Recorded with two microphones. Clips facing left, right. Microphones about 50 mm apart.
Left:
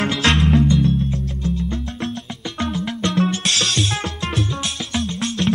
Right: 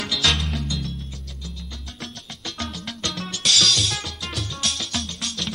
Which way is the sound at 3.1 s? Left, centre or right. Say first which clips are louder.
Left 5 dB; left.